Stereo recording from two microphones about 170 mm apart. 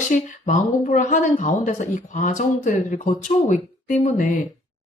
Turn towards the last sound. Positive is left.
turn(degrees=50)  # may be behind; listen again after turning